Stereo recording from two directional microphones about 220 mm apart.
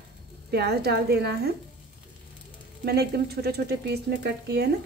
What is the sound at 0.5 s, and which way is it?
Speech, 45° right (ahead or behind).